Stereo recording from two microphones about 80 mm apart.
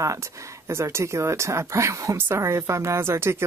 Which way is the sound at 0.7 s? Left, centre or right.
Right.